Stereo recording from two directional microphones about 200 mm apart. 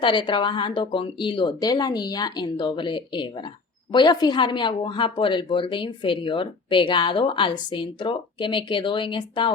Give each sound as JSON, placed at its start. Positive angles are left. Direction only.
{"t": 0.0, "sound": "a woman's voice", "side_deg": 25}